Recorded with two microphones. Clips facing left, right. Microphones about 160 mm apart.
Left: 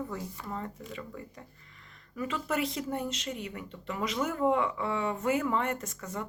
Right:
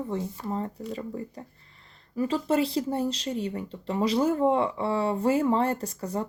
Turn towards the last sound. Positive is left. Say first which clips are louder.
# right 7 dB
turn(degrees=-35)  # may be behind; listen again after turning